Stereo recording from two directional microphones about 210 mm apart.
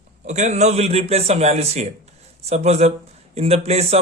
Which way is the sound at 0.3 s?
35° right (ahead or behind).